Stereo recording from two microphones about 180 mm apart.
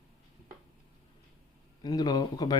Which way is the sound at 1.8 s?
20° left (ahead or behind).